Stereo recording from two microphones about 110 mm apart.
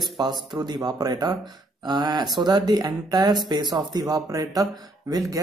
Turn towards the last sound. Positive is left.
turn(degrees=-30)  # may be behind; listen again after turning